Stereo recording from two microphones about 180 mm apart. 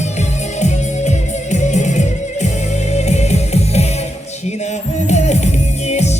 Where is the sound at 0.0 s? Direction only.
40° left (ahead or behind).